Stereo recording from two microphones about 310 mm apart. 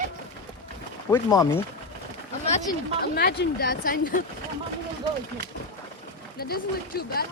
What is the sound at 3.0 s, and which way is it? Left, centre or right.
Speech, left.